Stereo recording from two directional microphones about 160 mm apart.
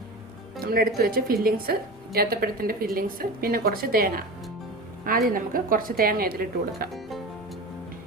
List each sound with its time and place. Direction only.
0.6 s a woman's voice: 65° right (ahead or behind)
5.3 s speech: 60° right (ahead or behind)